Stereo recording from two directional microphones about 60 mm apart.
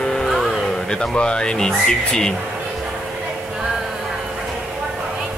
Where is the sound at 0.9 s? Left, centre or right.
Centre.